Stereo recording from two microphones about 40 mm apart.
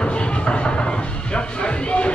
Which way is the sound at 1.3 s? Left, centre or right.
Left.